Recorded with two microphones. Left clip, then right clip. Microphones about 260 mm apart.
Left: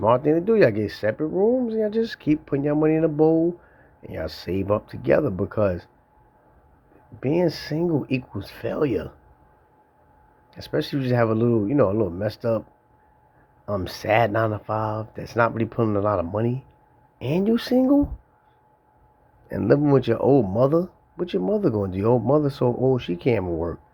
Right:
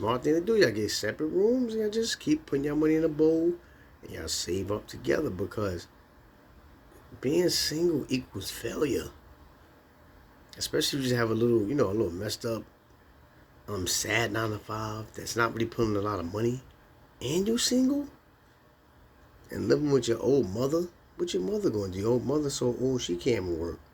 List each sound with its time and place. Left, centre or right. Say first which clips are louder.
0.0 s speech: left 8 dB; left
7.2 s speech: left 4 dB; left
10.5 s speech: left 3 dB; left
13.7 s speech: left 7 dB; left
19.5 s speech: left 7 dB; left